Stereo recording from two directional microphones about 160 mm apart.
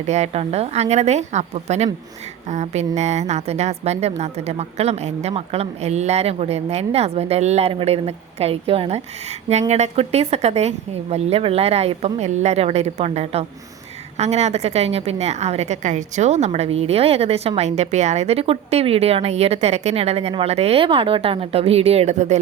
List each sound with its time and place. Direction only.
0.0 s a woman's voice: 45° right (ahead or behind)